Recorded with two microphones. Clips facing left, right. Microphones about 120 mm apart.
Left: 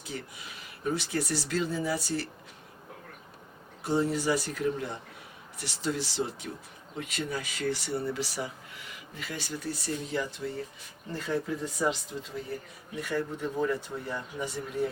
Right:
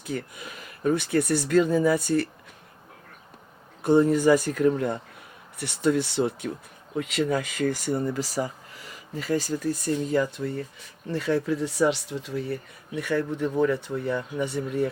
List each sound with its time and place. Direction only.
0.0 s speech: 55° right (ahead or behind)
3.8 s speech: 50° right (ahead or behind)
6.9 s speech: 70° right (ahead or behind)
7.3 s speech: 55° right (ahead or behind)
11.1 s speech: 75° right (ahead or behind)